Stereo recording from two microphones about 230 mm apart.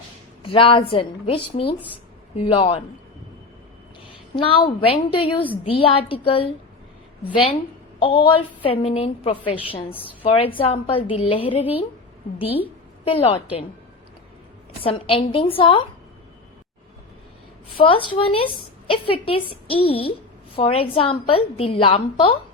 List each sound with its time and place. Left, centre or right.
0.4 s a woman's voice: left
4.1 s a sound: left
4.9 s a woman's voice: left
7.9 s a woman's voice: left
14.8 s a woman's voice: left
17.7 s a woman's voice: left